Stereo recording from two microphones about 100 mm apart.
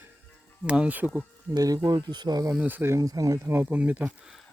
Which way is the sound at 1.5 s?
35° right (ahead or behind).